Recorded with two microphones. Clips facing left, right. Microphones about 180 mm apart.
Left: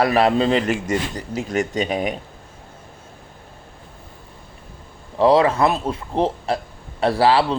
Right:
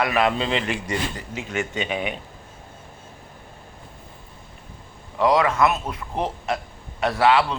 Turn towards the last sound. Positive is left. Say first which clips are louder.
# left 2 dB
turn(degrees=30)  # may be behind; listen again after turning